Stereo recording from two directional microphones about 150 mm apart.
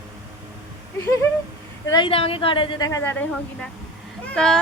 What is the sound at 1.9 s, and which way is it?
A woman's voice, 30° left (ahead or behind).